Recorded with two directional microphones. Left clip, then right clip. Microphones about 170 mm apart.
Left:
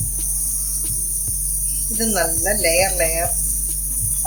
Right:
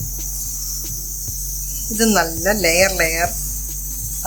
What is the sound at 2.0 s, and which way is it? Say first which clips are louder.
Speech: right 4 dB; 55° right (ahead or behind).